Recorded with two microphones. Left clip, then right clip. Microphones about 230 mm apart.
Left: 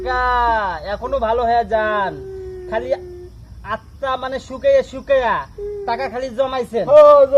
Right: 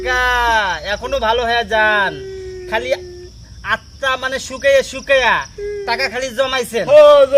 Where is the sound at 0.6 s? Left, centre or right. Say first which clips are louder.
Right 3 dB; right.